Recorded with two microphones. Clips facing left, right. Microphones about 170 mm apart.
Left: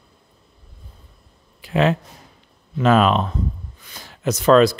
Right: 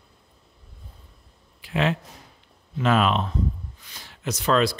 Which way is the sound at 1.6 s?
40° left (ahead or behind).